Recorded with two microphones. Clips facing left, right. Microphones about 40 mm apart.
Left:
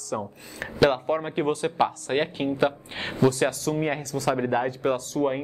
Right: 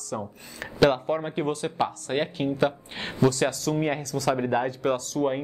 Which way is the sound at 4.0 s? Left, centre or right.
Left.